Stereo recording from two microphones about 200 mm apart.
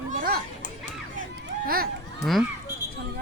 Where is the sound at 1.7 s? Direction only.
50° right (ahead or behind).